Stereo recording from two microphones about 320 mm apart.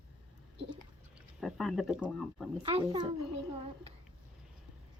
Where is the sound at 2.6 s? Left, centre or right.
Centre.